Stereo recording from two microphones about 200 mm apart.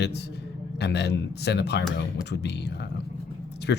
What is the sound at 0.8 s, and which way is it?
Speech, 60° left (ahead or behind).